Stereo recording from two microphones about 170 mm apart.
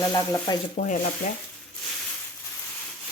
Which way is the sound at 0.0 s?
25° left (ahead or behind).